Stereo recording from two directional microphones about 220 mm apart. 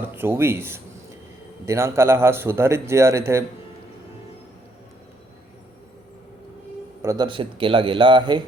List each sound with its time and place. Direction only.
0.2 s a man's voice: 10° right (ahead or behind)
7.0 s a man's voice: 15° right (ahead or behind)